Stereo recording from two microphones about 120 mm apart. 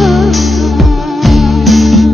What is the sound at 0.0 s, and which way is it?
Music, centre (ahead or behind).